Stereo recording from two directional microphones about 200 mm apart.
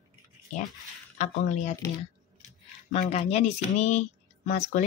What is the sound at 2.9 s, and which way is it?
Speech, 30° left (ahead or behind).